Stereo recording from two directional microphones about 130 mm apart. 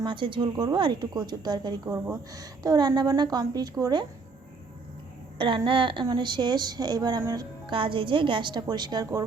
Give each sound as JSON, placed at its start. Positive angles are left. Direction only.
{"t": 0.0, "sound": "a woman's voice", "side_deg": -40}
{"t": 5.4, "sound": "a woman's voice", "side_deg": -40}
{"t": 7.7, "sound": "a woman's voice", "side_deg": -40}